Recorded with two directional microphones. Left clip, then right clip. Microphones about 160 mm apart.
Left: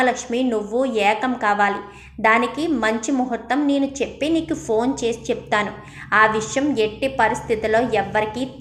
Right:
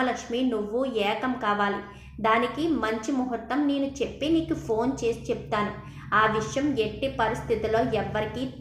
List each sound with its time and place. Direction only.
0.0 s a woman's voice: 30° left (ahead or behind)